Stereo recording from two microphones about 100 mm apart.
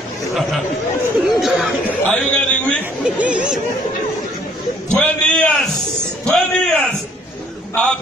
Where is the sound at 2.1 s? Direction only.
15° left (ahead or behind).